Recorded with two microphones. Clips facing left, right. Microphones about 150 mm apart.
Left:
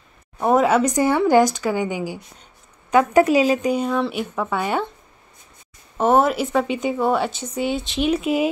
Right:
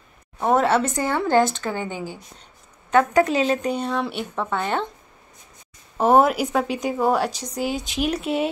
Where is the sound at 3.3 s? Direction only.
10° left (ahead or behind).